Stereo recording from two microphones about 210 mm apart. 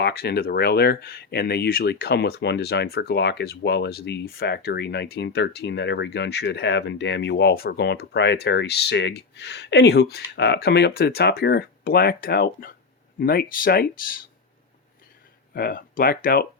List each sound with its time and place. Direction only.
0.0 s speech: 50° left (ahead or behind)
15.5 s speech: 45° left (ahead or behind)